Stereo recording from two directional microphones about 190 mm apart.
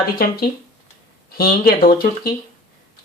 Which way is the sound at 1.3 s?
50° left (ahead or behind).